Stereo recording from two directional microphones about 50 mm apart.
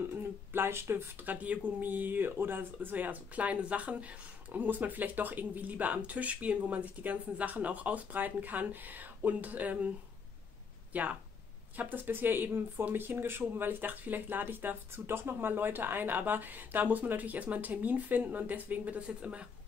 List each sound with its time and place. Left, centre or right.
0.2 s a sound: right
1.2 s speech: right
10.9 s speech: right